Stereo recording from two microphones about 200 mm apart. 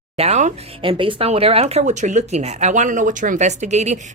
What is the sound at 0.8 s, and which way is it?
Speech, 25° right (ahead or behind).